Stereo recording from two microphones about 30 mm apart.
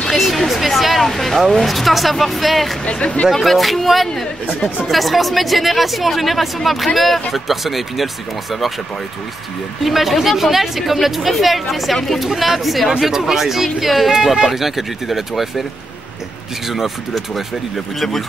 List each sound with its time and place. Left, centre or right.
0.1 s a sound: centre
1.0 s speech: centre
1.7 s speech: centre
2.8 s speech: left
3.3 s speech: centre
9.8 s speech: centre
13.0 s speech: centre
16.6 s speech: centre